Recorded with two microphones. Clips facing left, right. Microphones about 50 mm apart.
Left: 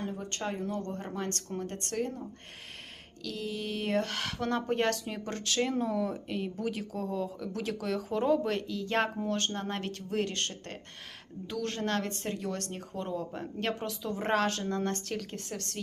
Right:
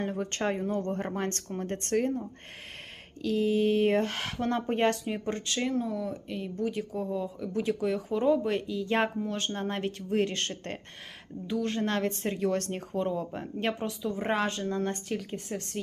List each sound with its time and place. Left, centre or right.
0.0 s speech: right
3.2 s speech: right
5.2 s speech: centre
6.9 s a woman's voice: centre; by 10.8 s right
11.6 s speech: centre
12.4 s speech: right
13.1 s speech: right
14.0 s a woman's voice: centre